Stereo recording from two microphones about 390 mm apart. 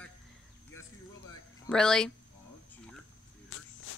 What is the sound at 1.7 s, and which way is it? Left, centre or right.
Speech, centre.